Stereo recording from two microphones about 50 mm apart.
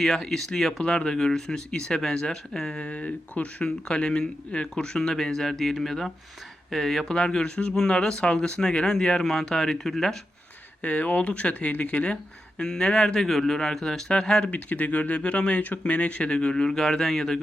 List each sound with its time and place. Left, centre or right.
0.0 s speech: centre
2.8 s speech: left; by 10.2 s centre
10.8 s speech: left
12.5 s speech: centre
14.5 s speech: left; by 17.4 s centre